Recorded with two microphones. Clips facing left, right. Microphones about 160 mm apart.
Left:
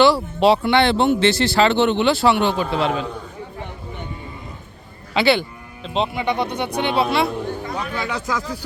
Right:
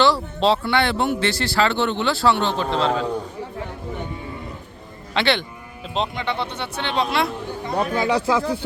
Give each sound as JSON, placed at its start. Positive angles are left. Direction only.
{"t": 0.0, "sound": "speech", "side_deg": 10}
{"t": 5.1, "sound": "speech", "side_deg": 5}
{"t": 6.2, "sound": "speech", "side_deg": 15}
{"t": 7.9, "sound": "speech", "side_deg": -25}